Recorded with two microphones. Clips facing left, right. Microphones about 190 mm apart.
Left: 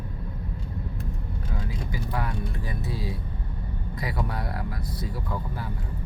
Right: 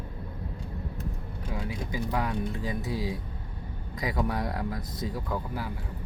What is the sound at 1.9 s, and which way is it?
Speech, 15° right (ahead or behind).